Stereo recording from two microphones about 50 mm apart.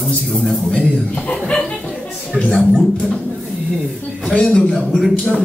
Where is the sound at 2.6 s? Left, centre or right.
Centre.